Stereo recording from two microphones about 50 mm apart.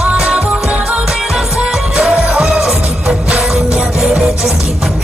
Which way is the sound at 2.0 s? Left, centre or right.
Right.